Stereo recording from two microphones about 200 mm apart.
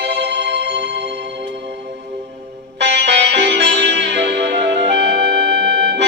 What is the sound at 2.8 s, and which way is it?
Music, 60° right (ahead or behind).